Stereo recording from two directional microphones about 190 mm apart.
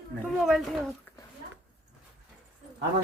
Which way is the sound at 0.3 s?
Centre (ahead or behind).